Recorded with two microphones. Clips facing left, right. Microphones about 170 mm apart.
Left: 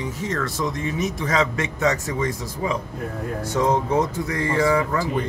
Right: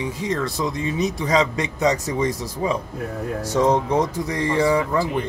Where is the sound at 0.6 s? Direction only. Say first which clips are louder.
Right 3 dB; 35° right (ahead or behind).